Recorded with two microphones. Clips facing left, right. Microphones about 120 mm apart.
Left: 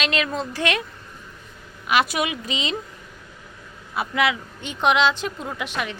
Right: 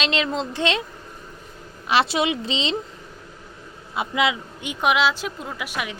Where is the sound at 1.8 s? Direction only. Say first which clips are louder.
Right 1 dB; 30° right (ahead or behind).